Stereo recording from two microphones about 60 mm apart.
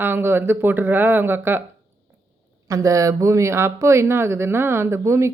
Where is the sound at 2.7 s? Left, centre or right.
Right.